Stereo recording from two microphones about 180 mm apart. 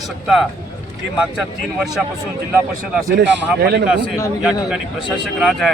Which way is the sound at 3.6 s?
65° right (ahead or behind).